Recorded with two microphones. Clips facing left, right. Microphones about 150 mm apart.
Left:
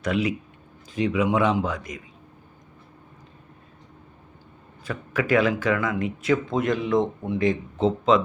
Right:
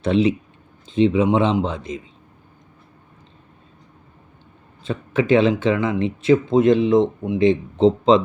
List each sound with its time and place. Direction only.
0.0 s speech: 25° right (ahead or behind)
4.8 s speech: 25° right (ahead or behind)